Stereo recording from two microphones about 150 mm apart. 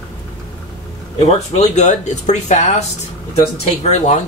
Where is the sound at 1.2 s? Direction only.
45° left (ahead or behind).